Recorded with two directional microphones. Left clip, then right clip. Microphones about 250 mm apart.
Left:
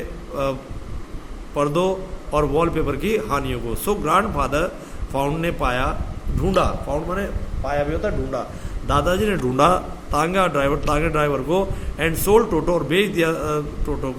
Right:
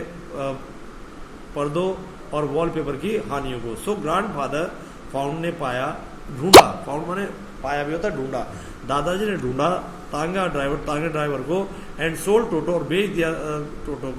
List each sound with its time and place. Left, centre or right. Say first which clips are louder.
0.4 s a man's voice: left 4 dB; left
1.5 s a man's voice: left 4 dB; left
6.9 s a man's voice: left 2 dB; centre
8.9 s a man's voice: left 3 dB; centre